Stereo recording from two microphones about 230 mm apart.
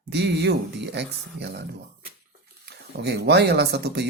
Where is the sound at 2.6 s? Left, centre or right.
Right.